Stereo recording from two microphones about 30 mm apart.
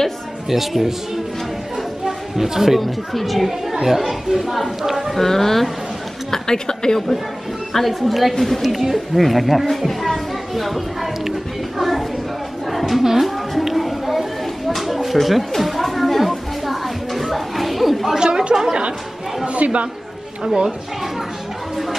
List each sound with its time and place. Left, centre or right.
0.5 s speech: centre
2.0 s a sound: centre
2.8 s a woman's voice: centre
5.1 s speech: centre
6.3 s a woman's voice: left
7.7 s a woman's voice: centre
9.7 s a sound: centre
12.7 s a sound: centre
13.0 s music: centre
14.7 s a sound: centre
18.2 s chatter: right
19.4 s speech: right
20.4 s a woman's voice: centre